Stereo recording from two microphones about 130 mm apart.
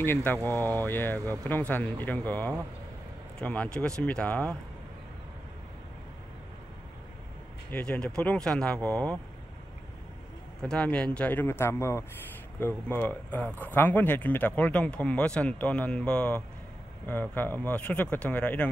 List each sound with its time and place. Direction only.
0.0 s speech: 15° left (ahead or behind)
7.7 s speech: 10° left (ahead or behind)
10.6 s speech: 5° left (ahead or behind)